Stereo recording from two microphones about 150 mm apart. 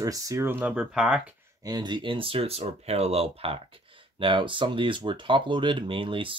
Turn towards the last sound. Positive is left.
turn(degrees=-35)  # may be behind; listen again after turning